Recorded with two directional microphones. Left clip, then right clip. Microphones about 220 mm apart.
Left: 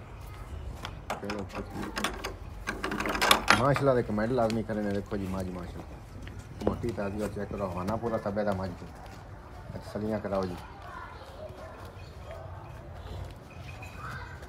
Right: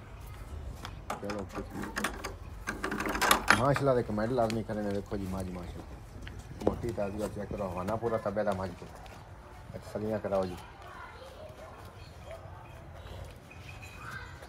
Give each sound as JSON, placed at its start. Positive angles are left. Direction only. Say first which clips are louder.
{"t": 0.8, "sound": "a sound", "louder": "left 2 dB", "side_deg": 0}
{"t": 4.0, "sound": "speech", "louder": "left 2 dB", "side_deg": 0}
{"t": 7.9, "sound": "a man's voice", "louder": "right 1 dB", "side_deg": -30}
{"t": 10.1, "sound": "speech", "louder": "right 1 dB", "side_deg": -30}